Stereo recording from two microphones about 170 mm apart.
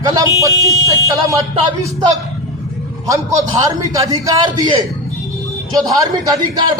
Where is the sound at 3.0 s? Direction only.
20° right (ahead or behind).